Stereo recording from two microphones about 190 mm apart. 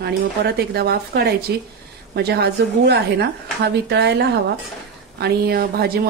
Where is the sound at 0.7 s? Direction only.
55° right (ahead or behind).